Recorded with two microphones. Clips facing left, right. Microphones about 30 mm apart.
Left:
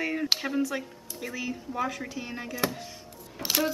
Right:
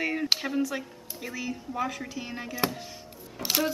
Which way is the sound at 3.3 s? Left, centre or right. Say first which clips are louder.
Even; centre.